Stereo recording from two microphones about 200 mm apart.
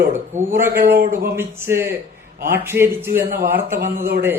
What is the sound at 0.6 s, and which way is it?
Speech, 50° right (ahead or behind).